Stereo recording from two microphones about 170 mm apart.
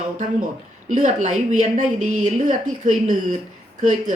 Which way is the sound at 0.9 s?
45° right (ahead or behind).